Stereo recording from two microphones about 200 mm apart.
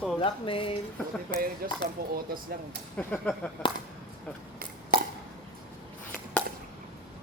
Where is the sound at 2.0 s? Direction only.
50° right (ahead or behind).